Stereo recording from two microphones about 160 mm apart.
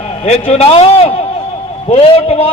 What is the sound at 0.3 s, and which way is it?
A man's voice, 40° left (ahead or behind).